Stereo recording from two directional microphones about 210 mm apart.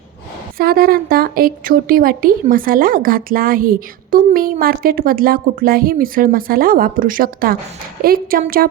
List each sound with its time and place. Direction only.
0.6 s a woman's voice: 45° right (ahead or behind)